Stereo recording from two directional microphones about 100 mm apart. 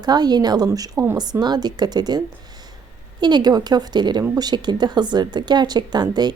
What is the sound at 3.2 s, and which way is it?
A woman's voice, 45° right (ahead or behind).